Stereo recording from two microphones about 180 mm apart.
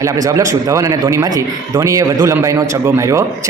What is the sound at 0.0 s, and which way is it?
A man's voice, 15° right (ahead or behind).